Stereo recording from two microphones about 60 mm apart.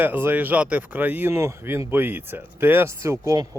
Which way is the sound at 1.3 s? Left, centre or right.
Right.